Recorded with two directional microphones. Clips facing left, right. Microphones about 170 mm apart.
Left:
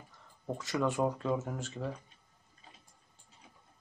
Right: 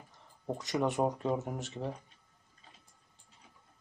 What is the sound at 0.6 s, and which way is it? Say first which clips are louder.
Speech: even; 20° right (ahead or behind).